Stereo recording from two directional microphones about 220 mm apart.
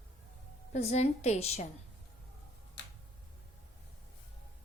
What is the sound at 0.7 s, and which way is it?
Speech, 30° left (ahead or behind).